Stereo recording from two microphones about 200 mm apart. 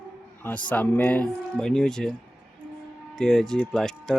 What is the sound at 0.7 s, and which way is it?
Speech, 10° left (ahead or behind).